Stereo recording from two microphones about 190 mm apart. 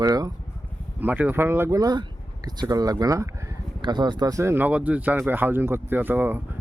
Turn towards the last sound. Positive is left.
turn(degrees=-10)  # may be behind; listen again after turning